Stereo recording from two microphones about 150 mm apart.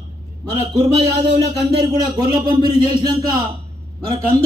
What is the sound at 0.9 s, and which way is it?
A man's voice, 30° right (ahead or behind).